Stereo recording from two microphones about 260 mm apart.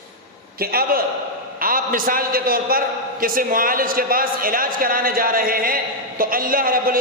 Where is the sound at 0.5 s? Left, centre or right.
Right.